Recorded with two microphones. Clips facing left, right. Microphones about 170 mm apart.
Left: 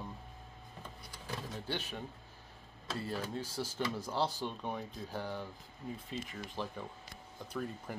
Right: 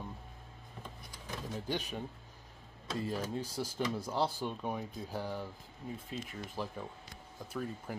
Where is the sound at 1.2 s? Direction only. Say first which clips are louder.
Right 2 dB; 15° right (ahead or behind).